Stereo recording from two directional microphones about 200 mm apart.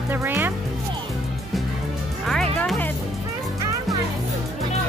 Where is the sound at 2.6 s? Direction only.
Centre (ahead or behind).